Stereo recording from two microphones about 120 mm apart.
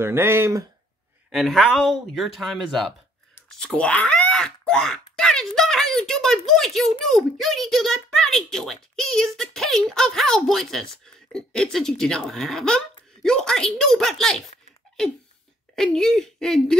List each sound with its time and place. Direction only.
0.0 s speech: 20° right (ahead or behind)
1.3 s a child's voice: centre (ahead or behind)
3.4 s wail: 10° left (ahead or behind)
7.1 s a child's voice: centre (ahead or behind)
15.7 s a child's voice: 5° left (ahead or behind)